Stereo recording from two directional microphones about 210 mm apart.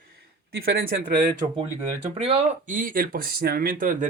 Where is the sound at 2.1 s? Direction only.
30° right (ahead or behind).